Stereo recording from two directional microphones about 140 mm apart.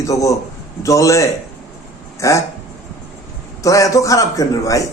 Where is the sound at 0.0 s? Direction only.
25° left (ahead or behind).